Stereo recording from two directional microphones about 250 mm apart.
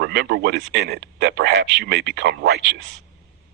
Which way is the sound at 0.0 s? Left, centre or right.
Right.